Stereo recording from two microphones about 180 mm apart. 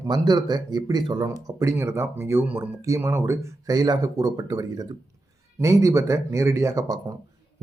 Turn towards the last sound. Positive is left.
turn(degrees=-20)  # may be behind; listen again after turning